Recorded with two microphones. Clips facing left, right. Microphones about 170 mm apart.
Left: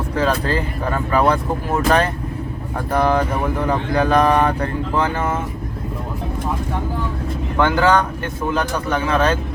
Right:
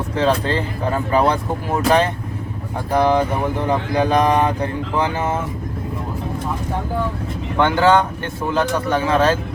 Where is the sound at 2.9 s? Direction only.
15° right (ahead or behind).